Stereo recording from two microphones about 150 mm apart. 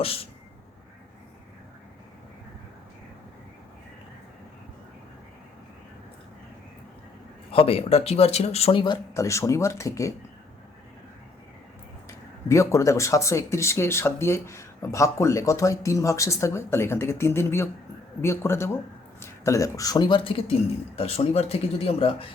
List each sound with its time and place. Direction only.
0.0 s speech: 40° left (ahead or behind)
7.5 s speech: 40° left (ahead or behind); by 10.2 s 20° left (ahead or behind)
12.0 s speech: 20° left (ahead or behind); by 22.3 s 40° left (ahead or behind)